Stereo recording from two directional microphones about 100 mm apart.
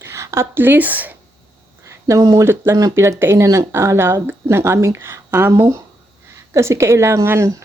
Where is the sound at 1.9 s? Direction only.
30° right (ahead or behind).